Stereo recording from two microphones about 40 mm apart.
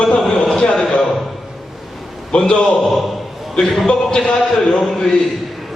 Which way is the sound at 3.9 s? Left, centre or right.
Left.